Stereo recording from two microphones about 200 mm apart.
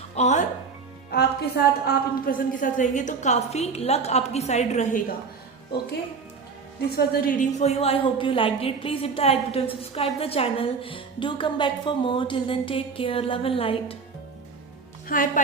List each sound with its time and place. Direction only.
0.2 s a woman's voice: 35° left (ahead or behind)
1.1 s a woman's voice: 55° left (ahead or behind); by 5.0 s 35° left (ahead or behind)
6.9 s a woman's voice: 50° left (ahead or behind); by 13.9 s 30° left (ahead or behind)
15.0 s a woman's voice: 45° left (ahead or behind)